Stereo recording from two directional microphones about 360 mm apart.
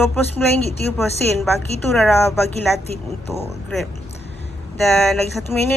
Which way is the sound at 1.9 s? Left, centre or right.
Centre.